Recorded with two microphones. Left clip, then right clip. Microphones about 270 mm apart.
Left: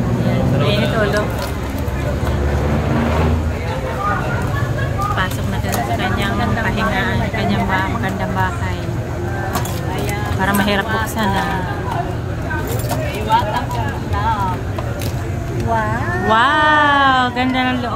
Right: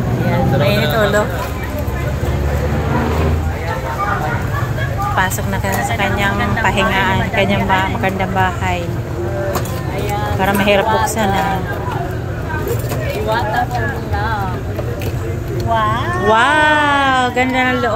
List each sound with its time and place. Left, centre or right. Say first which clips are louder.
0.7 s a sound: right 2 dB; centre
5.9 s vehicle: right 3 dB; centre
10.4 s speech: right 4 dB; centre
15.9 s speech: right 2 dB; centre